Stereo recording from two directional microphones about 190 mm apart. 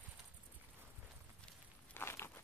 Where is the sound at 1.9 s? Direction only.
15° left (ahead or behind).